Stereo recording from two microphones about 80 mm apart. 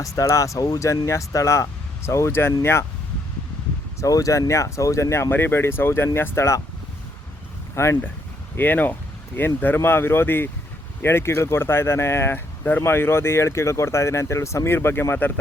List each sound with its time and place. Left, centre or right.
0.0 s speech: left
4.0 s speech: left
7.8 s speech: left